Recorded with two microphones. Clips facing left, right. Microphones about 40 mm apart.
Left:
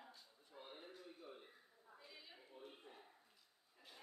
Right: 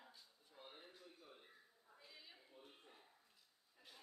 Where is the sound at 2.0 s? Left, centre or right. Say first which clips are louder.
Left 1 dB; centre.